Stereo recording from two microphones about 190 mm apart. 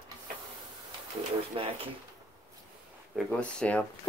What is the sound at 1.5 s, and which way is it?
Speech, 30° right (ahead or behind).